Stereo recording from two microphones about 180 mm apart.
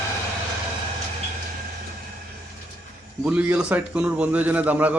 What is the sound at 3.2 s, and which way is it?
A man's voice, 5° right (ahead or behind).